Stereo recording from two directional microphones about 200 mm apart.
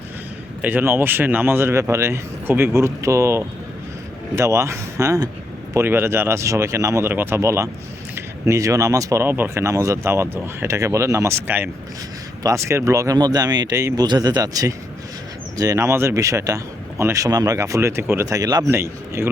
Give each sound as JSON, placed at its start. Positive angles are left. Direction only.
{"t": 0.6, "sound": "speech", "side_deg": -10}